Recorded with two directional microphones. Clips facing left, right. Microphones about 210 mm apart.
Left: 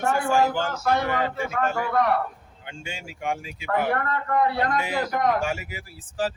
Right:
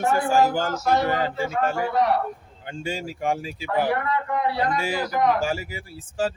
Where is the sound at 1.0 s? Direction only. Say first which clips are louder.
Right 2 dB; 35° right (ahead or behind).